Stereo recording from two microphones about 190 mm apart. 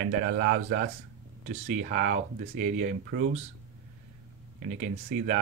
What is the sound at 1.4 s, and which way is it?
Speech, 35° right (ahead or behind).